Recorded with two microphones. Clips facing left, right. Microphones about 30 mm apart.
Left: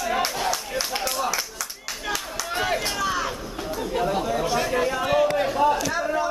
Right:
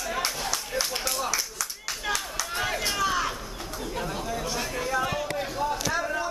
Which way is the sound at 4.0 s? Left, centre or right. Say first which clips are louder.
Left 8 dB; left.